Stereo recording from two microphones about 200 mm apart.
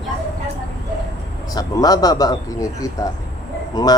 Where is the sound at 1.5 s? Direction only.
20° left (ahead or behind).